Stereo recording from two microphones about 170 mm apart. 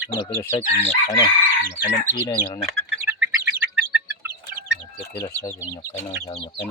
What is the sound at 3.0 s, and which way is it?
Bird, 10° right (ahead or behind).